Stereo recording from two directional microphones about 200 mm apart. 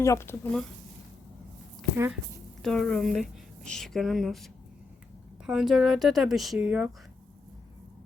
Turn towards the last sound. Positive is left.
turn(degrees=-5)  # may be behind; listen again after turning